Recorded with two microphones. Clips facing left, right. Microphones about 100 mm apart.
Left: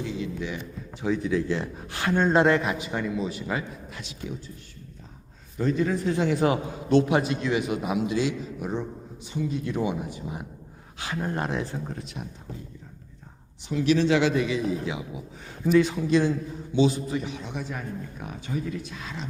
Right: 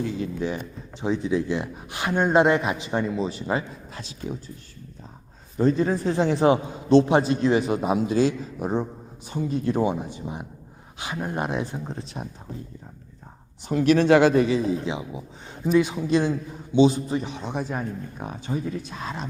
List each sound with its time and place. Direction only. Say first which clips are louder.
0.0 s speech: right 4 dB; 45° right (ahead or behind)
1.0 s speech: right 1 dB; 25° right (ahead or behind)
5.5 s a man's voice: right 4 dB; 35° right (ahead or behind)
13.7 s a man's voice: right 4 dB; 50° right (ahead or behind)